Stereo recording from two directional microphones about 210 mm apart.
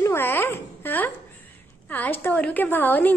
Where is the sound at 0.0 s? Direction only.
10° left (ahead or behind).